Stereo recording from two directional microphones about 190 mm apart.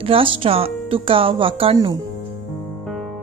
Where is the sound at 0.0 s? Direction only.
30° right (ahead or behind).